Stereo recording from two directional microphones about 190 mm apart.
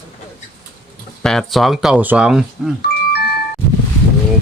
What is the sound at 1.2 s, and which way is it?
Speech, centre (ahead or behind).